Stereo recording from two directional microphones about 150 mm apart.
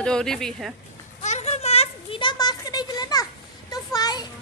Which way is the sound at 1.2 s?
50° left (ahead or behind).